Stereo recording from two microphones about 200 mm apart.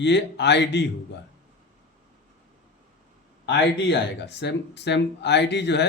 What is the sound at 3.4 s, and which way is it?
Speech, 60° left (ahead or behind).